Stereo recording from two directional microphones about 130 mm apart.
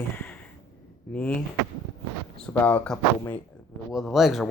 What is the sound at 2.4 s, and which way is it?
Speech, 10° left (ahead or behind).